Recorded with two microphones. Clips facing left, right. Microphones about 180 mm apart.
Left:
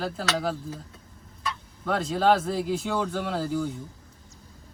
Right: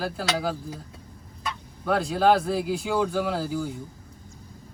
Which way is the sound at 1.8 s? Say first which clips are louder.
Right 2 dB; 5° right (ahead or behind).